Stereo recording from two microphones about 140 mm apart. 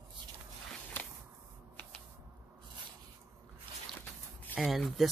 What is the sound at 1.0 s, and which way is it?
Whip, 15° left (ahead or behind).